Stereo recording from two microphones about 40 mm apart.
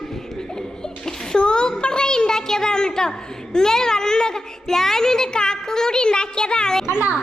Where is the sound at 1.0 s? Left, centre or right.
Centre.